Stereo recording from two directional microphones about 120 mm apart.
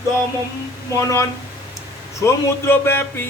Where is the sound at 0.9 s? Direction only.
25° left (ahead or behind).